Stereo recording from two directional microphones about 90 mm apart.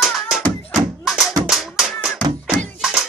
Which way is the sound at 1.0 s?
5° right (ahead or behind).